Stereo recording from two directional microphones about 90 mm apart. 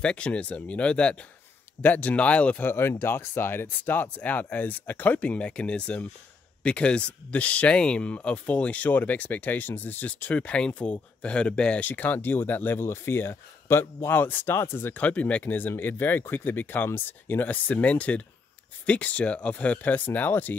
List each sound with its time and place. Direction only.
0.0 s speech: 10° left (ahead or behind)